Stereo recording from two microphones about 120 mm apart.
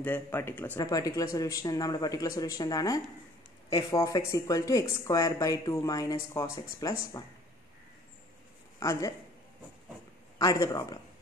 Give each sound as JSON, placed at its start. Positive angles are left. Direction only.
{"t": 0.0, "sound": "speech", "side_deg": 15}
{"t": 0.7, "sound": "speech", "side_deg": 30}
{"t": 8.7, "sound": "a woman's voice", "side_deg": 30}
{"t": 10.4, "sound": "speech", "side_deg": 30}